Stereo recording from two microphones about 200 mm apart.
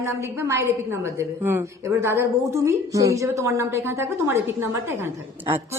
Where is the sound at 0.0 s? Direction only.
15° right (ahead or behind).